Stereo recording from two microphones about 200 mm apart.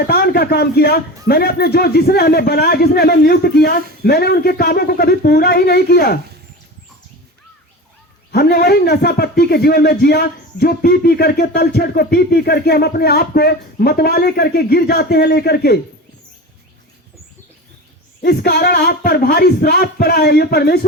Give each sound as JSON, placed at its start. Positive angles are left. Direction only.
{"t": 0.1, "sound": "a man's voice", "side_deg": 50}
{"t": 8.3, "sound": "a man's voice", "side_deg": 50}
{"t": 18.2, "sound": "a man's voice", "side_deg": 55}